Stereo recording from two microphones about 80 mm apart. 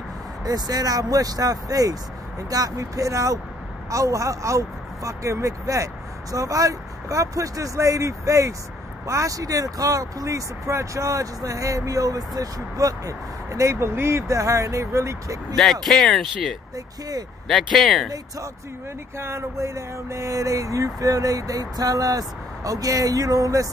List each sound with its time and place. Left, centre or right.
0.5 s speech: right
15.5 s speech: centre
17.7 s speech: centre
19.1 s speech: right